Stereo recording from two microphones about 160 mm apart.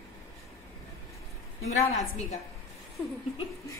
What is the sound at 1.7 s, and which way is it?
Speech, 45° left (ahead or behind).